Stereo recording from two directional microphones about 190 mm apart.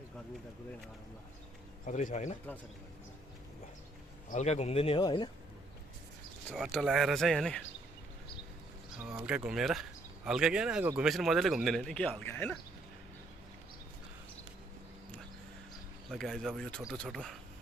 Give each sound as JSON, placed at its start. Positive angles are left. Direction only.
{"t": 1.9, "sound": "a man's voice", "side_deg": 40}
{"t": 4.3, "sound": "a man's voice", "side_deg": 35}
{"t": 6.5, "sound": "speech", "side_deg": 0}
{"t": 9.0, "sound": "speech", "side_deg": -5}
{"t": 16.0, "sound": "speech", "side_deg": 0}